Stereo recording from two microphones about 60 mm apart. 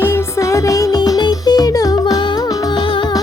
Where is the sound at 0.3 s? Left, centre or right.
Left.